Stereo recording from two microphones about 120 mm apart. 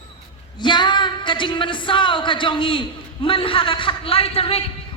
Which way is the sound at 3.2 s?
50° left (ahead or behind).